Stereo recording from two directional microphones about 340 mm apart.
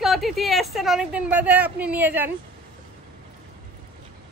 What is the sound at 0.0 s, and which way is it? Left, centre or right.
A woman's voice, centre.